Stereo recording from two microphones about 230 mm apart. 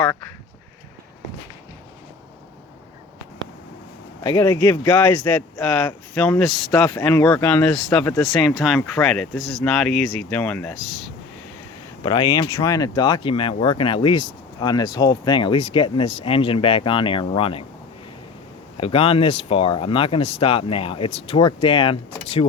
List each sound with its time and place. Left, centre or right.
4.2 s speech: centre
12.0 s speech: centre
18.8 s speech: left